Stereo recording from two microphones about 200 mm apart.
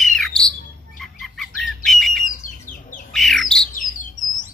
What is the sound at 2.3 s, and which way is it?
Bird, 40° left (ahead or behind).